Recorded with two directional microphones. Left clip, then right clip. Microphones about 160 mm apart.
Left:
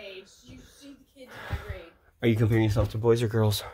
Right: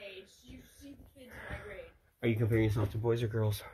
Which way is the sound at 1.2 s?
25° left (ahead or behind).